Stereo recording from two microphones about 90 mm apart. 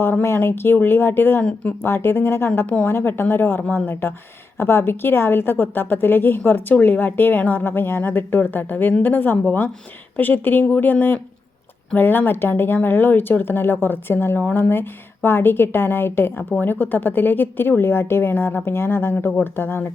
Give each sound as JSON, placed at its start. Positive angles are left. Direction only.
{"t": 0.0, "sound": "a woman's voice", "side_deg": 25}
{"t": 2.6, "sound": "a woman's voice", "side_deg": 15}
{"t": 2.8, "sound": "a woman's voice", "side_deg": 25}